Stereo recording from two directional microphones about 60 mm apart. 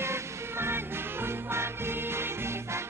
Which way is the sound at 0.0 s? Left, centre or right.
Right.